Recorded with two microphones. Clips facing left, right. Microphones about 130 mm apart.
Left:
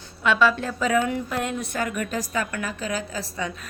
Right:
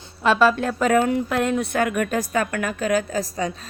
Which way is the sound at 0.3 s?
45° right (ahead or behind).